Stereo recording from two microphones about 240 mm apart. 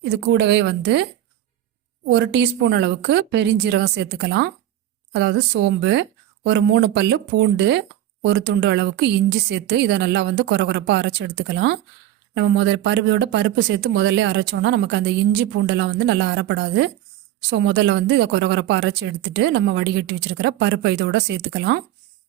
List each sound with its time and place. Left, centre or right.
0.0 s speech: right
2.0 s speech: right